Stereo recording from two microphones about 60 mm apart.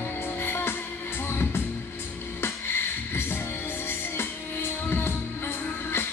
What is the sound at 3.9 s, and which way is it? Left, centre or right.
Music, left.